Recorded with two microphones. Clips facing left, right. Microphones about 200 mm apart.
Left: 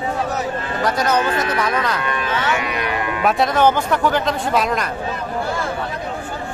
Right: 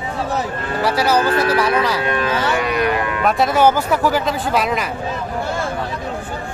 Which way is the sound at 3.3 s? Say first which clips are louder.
Right 1 dB; centre (ahead or behind).